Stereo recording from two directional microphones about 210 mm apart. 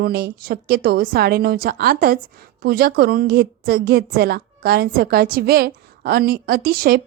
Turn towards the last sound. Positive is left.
turn(degrees=-45)  # may be behind; listen again after turning